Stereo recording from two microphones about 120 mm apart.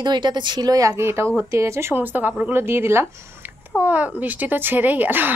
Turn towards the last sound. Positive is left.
turn(degrees=-15)  # may be behind; listen again after turning